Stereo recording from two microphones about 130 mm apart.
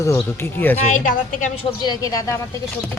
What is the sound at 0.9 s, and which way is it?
Speech, 75° left (ahead or behind).